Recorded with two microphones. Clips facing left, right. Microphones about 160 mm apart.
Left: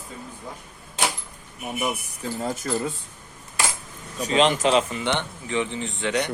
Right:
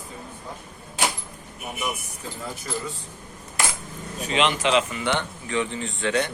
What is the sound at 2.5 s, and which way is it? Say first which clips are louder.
Speech: left 5 dB; 50° left (ahead or behind).